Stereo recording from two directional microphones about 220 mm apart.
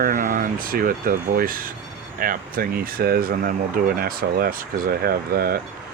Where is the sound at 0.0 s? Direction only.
35° right (ahead or behind).